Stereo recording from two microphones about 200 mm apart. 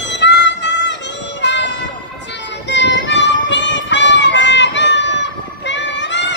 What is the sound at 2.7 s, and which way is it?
Music, 60° left (ahead or behind).